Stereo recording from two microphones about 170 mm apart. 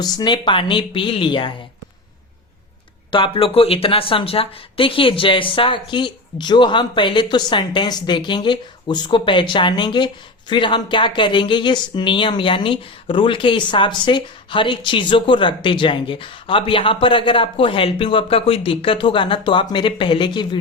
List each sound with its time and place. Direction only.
0.0 s speech: 25° left (ahead or behind)
3.1 s speech: 30° left (ahead or behind)